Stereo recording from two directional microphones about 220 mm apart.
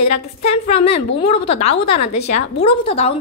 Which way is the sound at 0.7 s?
25° left (ahead or behind).